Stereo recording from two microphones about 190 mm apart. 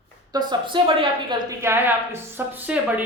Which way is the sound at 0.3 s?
25° right (ahead or behind).